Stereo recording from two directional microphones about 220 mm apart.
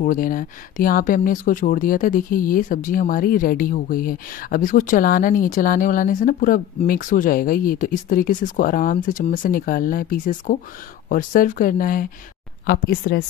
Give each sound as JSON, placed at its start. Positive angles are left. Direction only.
{"t": 0.0, "sound": "speech", "side_deg": 40}